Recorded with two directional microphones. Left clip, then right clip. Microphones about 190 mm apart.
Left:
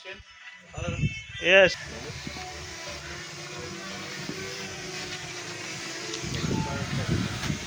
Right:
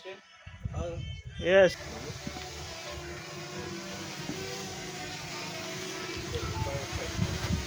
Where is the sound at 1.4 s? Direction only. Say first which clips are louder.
Left 4 dB; 5° right (ahead or behind).